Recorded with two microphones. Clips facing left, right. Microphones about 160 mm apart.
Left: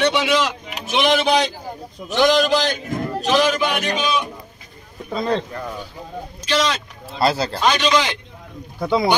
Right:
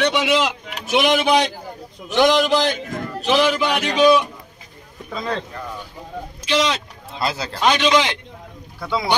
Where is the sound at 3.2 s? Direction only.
30° right (ahead or behind).